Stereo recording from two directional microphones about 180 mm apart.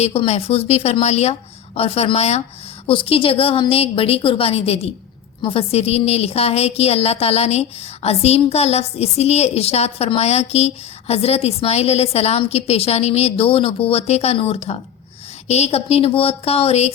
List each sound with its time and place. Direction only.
0.0 s a woman's voice: 35° left (ahead or behind)